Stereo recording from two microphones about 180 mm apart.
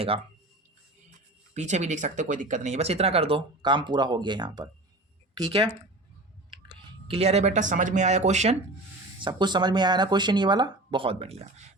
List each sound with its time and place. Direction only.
1.5 s speech: 40° right (ahead or behind)
9.2 s speech: 25° right (ahead or behind)